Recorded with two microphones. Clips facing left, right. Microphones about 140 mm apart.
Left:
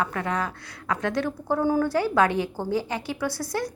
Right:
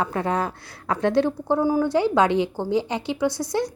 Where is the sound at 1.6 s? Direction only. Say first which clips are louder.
Right 2 dB; 15° right (ahead or behind).